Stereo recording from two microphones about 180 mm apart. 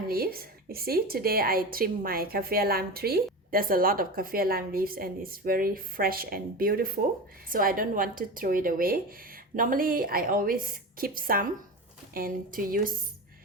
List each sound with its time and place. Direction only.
0.1 s a woman's voice: 55° right (ahead or behind)